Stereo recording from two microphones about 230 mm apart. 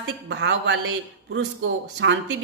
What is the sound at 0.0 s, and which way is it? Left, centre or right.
A woman's voice, right.